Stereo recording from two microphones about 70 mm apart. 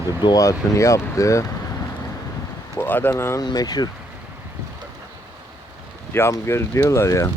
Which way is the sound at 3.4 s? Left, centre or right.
Left.